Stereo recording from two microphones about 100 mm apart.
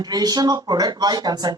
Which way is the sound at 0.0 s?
40° right (ahead or behind).